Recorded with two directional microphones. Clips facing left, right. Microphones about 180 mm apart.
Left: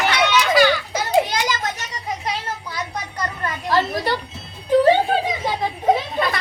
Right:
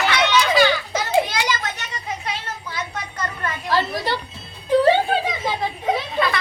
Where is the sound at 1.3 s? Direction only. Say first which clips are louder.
Left 1 dB; 40° left (ahead or behind).